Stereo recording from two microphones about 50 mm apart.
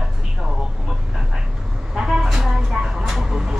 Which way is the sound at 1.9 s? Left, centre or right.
Centre.